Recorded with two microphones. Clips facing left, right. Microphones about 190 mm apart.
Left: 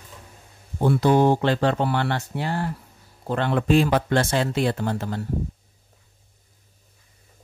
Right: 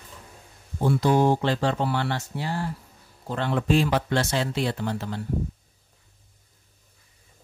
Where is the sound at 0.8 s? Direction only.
60° left (ahead or behind).